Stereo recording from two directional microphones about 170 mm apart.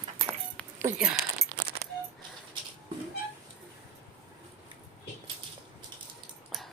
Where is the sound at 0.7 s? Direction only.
15° right (ahead or behind).